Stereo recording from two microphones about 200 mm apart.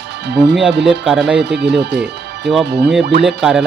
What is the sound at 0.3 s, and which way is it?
Speech, 60° right (ahead or behind).